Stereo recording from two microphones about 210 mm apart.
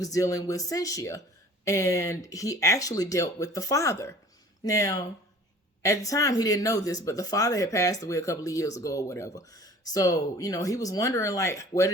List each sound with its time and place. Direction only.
0.0 s speech: 15° left (ahead or behind)